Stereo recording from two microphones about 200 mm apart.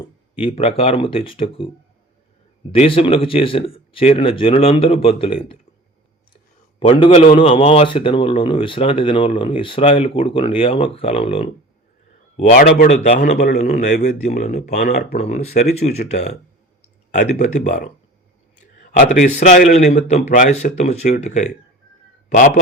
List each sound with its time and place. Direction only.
0.3 s speech: 30° left (ahead or behind)
2.7 s speech: 25° left (ahead or behind)
12.4 s a man's voice: 40° left (ahead or behind)